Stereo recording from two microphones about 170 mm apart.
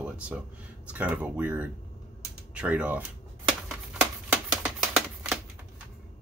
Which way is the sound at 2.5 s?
5° right (ahead or behind).